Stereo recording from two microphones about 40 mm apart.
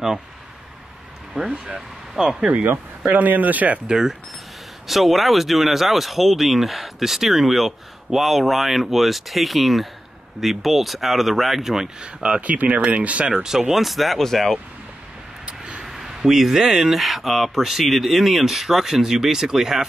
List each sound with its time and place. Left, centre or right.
1.3 s speech: right
2.2 s speech: centre
3.1 s speech: right
3.8 s speech: centre
4.8 s speech: centre
12.0 s speech: right
12.4 s speech: right
13.4 s speech: centre
15.8 s speech: centre